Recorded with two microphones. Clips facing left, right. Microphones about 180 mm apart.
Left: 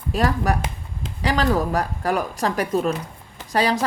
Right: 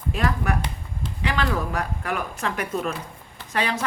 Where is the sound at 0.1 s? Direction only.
35° left (ahead or behind).